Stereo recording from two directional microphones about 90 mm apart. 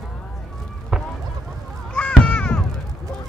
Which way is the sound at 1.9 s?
10° left (ahead or behind).